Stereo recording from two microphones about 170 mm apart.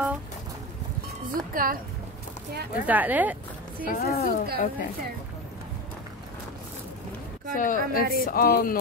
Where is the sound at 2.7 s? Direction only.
10° right (ahead or behind).